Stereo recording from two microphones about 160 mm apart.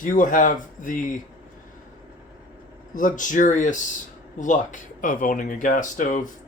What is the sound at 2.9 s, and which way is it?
Speech, 55° left (ahead or behind).